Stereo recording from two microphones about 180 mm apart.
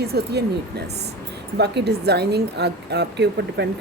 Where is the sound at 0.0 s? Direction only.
65° right (ahead or behind).